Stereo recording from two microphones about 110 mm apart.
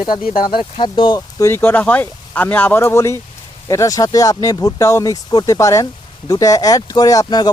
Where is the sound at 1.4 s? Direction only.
20° left (ahead or behind).